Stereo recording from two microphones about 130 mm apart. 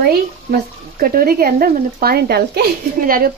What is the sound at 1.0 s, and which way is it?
Speech, 90° right.